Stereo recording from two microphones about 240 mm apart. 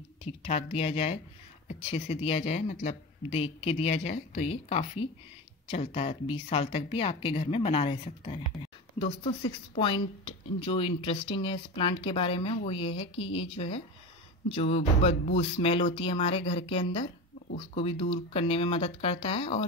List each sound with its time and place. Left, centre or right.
0.2 s speech: left